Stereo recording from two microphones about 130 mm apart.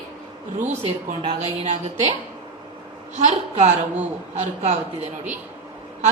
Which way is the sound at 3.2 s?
60° right (ahead or behind).